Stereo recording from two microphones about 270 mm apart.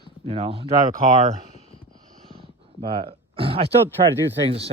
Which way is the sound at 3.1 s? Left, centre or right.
Centre.